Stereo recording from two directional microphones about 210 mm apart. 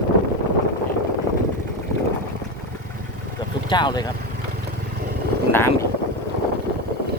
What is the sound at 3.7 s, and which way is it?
Speech, 20° left (ahead or behind).